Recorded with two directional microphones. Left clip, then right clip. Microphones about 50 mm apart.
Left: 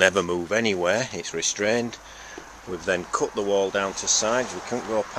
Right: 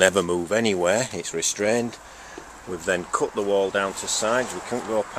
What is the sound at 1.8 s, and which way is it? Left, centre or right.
Speech, right.